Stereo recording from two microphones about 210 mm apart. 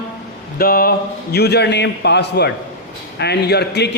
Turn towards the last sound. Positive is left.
turn(degrees=55)  # may be behind; listen again after turning